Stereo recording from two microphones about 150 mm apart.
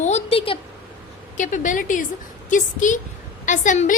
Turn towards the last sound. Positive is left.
turn(degrees=55)  # may be behind; listen again after turning